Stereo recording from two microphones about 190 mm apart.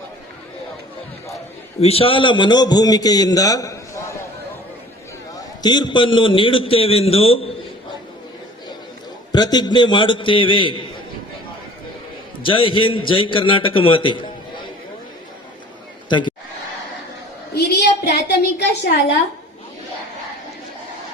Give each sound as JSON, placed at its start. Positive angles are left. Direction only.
{"t": 1.8, "sound": "a man's voice", "side_deg": 30}
{"t": 5.6, "sound": "a man's voice", "side_deg": 25}
{"t": 9.3, "sound": "a man's voice", "side_deg": 20}
{"t": 12.4, "sound": "a man's voice", "side_deg": 25}
{"t": 16.0, "sound": "a man's voice", "side_deg": 25}
{"t": 17.5, "sound": "a sound", "side_deg": 60}